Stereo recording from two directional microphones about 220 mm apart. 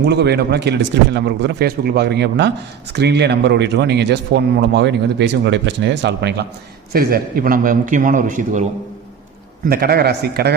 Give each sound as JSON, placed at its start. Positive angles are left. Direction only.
{"t": 0.0, "sound": "a man's voice", "side_deg": -50}
{"t": 9.6, "sound": "a man's voice", "side_deg": -45}